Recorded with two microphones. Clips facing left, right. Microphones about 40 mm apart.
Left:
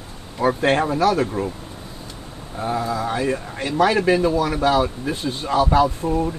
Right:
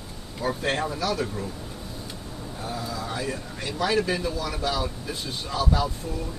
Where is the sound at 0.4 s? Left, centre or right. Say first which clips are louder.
Left 8 dB; left.